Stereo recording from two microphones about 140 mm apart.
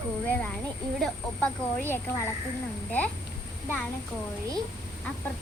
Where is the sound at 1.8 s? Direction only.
15° left (ahead or behind).